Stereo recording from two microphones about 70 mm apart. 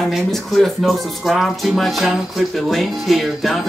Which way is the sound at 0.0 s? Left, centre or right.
Centre.